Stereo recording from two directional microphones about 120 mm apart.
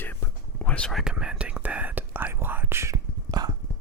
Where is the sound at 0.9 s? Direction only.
5° right (ahead or behind); by 2.9 s 20° right (ahead or behind).